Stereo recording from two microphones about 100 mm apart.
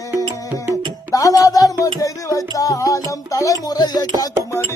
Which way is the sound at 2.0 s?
35° left (ahead or behind).